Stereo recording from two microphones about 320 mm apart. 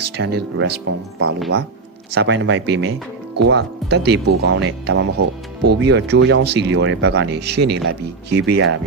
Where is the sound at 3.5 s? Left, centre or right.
Right.